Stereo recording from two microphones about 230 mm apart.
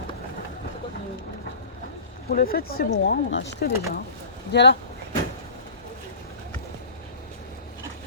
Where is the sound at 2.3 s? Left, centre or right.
Left.